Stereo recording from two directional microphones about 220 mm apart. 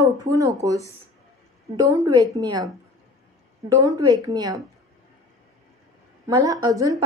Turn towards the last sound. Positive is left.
turn(degrees=-15)  # may be behind; listen again after turning